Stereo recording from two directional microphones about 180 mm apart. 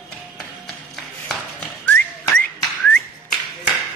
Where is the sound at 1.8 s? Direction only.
10° left (ahead or behind).